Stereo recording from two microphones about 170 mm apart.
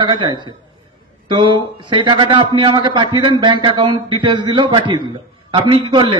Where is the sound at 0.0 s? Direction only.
25° right (ahead or behind).